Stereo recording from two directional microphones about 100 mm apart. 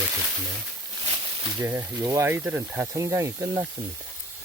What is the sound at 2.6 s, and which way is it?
Speech, 15° right (ahead or behind).